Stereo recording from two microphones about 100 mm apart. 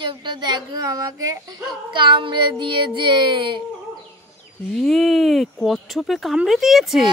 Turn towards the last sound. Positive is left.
turn(degrees=-5)  # may be behind; listen again after turning